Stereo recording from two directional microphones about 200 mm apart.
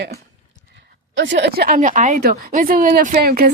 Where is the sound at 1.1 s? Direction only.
60° right (ahead or behind).